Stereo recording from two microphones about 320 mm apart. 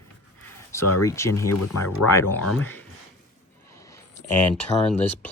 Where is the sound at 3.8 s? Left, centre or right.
Centre.